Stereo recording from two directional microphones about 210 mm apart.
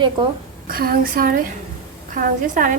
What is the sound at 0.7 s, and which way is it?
A woman's voice, 45° right (ahead or behind).